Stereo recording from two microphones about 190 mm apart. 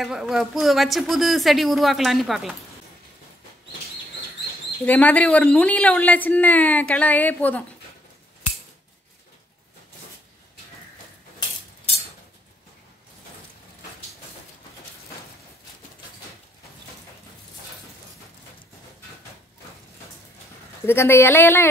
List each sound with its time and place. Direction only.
0.0 s speech: centre (ahead or behind)
4.8 s a woman's voice: 10° left (ahead or behind)
20.8 s a woman's voice: 10° left (ahead or behind)